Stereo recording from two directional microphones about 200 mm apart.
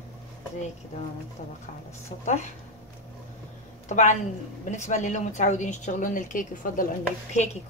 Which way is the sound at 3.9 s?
35° left (ahead or behind).